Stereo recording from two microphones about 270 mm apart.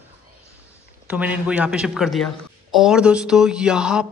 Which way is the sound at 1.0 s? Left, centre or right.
Centre.